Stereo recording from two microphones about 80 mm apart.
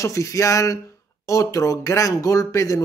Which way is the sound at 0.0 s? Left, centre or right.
Left.